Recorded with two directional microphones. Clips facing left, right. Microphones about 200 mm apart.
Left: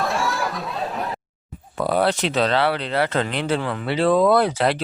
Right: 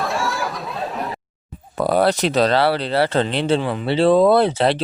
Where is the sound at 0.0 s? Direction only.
Centre (ahead or behind).